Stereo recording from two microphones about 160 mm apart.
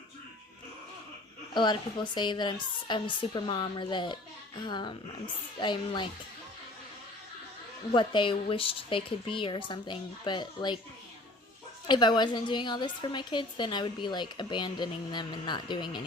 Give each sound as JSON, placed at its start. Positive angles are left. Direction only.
{"t": 1.5, "sound": "a woman's voice", "side_deg": 30}
{"t": 7.9, "sound": "a woman's voice", "side_deg": 30}
{"t": 11.9, "sound": "a woman's voice", "side_deg": 30}